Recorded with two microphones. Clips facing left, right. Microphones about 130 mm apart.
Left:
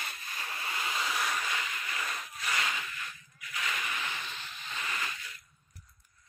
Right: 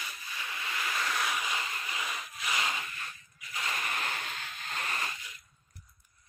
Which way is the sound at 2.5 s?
25° right (ahead or behind).